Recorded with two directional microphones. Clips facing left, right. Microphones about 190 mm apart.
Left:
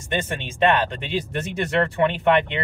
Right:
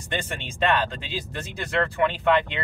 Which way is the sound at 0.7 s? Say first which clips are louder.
Left 4 dB; 20° left (ahead or behind).